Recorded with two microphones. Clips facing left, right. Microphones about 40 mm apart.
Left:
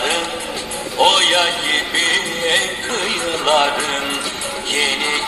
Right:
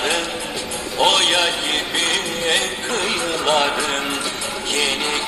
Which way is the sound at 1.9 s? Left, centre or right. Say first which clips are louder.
Left 3 dB; left.